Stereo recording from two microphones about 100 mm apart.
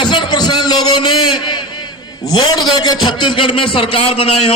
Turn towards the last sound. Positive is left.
turn(degrees=75)  # may be behind; listen again after turning